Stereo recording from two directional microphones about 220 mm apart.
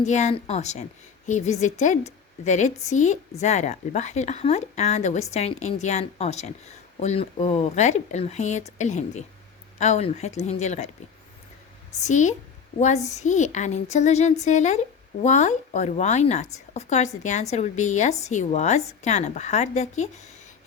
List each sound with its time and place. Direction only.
0.0 s a woman's voice: 30° left (ahead or behind)
12.0 s speech: 35° left (ahead or behind)